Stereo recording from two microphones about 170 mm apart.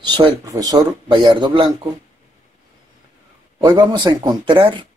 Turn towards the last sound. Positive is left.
turn(degrees=-30)  # may be behind; listen again after turning